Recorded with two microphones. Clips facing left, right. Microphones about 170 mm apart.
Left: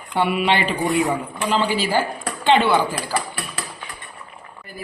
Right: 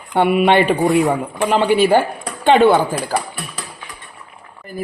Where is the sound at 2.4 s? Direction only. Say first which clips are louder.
Right 5 dB; 50° right (ahead or behind).